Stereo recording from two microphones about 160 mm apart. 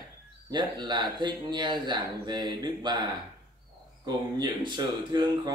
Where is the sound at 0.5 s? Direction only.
25° right (ahead or behind).